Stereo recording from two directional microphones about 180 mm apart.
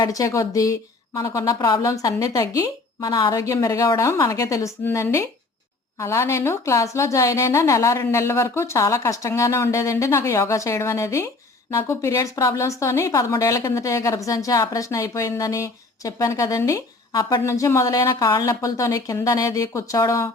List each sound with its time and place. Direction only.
0.0 s a woman's voice: 20° left (ahead or behind)